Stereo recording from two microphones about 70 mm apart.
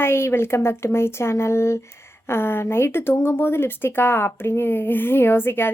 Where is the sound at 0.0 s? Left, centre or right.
Left.